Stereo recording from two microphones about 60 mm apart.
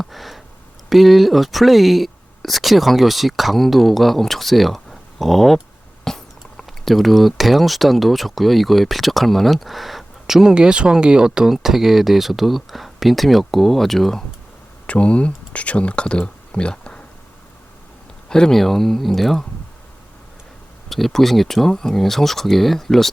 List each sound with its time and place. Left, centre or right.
0.0 s a sound: centre
0.9 s speech: centre
14.8 s speech: left
18.3 s speech: centre
20.9 s speech: centre